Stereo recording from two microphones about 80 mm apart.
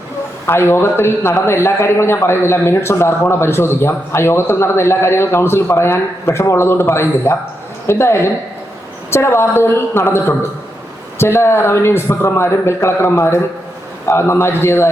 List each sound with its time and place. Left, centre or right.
0.4 s speech: left